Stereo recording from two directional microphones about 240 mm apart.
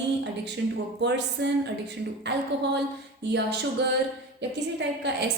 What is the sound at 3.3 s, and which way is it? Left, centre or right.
Speech, right.